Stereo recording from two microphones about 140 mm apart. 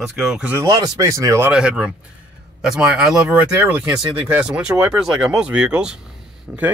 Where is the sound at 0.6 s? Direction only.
25° right (ahead or behind).